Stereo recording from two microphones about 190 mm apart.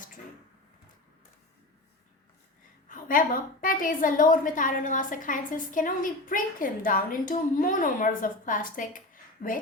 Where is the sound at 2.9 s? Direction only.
45° left (ahead or behind).